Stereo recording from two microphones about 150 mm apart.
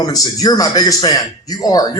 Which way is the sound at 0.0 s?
25° left (ahead or behind).